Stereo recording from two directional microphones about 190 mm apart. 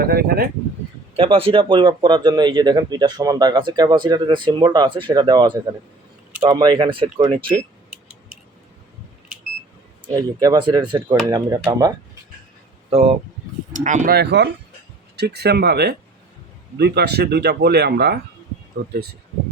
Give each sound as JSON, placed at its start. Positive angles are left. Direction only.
{"t": 0.0, "sound": "speech", "side_deg": -50}
{"t": 1.1, "sound": "speech", "side_deg": -30}
{"t": 10.2, "sound": "speech", "side_deg": -20}
{"t": 12.9, "sound": "speech", "side_deg": -30}